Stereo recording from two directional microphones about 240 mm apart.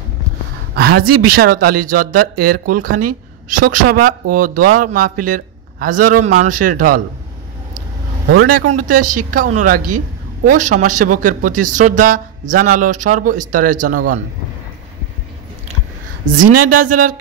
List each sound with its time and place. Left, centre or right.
0.7 s a man's voice: right
8.5 s speech: right
16.6 s speech: right